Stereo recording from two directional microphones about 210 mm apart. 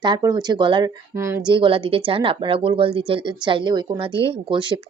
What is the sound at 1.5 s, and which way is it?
Speech, 25° right (ahead or behind).